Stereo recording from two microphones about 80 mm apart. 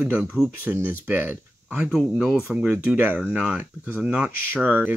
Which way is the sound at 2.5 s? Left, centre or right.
Right.